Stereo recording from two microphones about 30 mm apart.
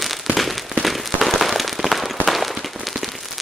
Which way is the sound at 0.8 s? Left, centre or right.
Centre.